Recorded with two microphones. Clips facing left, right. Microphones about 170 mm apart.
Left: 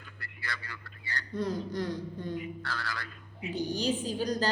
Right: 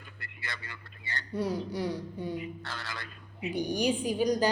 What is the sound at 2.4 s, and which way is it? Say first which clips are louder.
A woman's voice: left 2 dB; 20° right (ahead or behind).